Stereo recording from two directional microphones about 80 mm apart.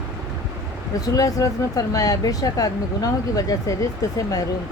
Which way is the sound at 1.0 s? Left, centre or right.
Left.